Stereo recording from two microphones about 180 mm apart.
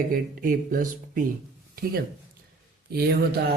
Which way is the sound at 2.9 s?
60° right (ahead or behind).